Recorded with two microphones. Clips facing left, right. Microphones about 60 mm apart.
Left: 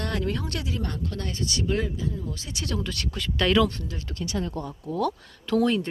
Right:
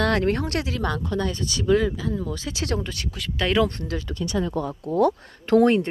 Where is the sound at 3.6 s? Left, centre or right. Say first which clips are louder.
Right 2 dB; right.